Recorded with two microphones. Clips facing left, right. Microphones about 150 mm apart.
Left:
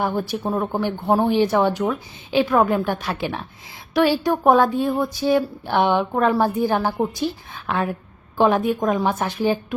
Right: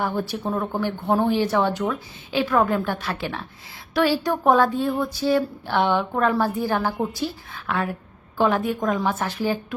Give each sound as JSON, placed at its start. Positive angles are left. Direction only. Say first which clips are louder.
{"t": 0.0, "sound": "a woman's voice", "louder": "left 2 dB", "side_deg": 15}